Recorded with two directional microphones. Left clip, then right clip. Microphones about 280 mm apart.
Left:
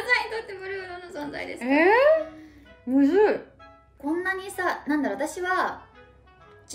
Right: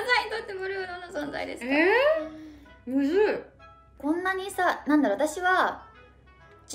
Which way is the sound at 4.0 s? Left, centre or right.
Centre.